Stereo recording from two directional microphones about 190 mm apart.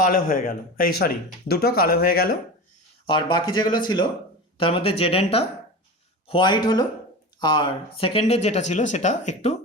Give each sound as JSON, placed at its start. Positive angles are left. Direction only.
{"t": 0.0, "sound": "speech", "side_deg": 45}
{"t": 3.1, "sound": "speech", "side_deg": 25}